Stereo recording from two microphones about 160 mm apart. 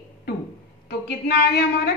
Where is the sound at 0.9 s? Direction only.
90° left.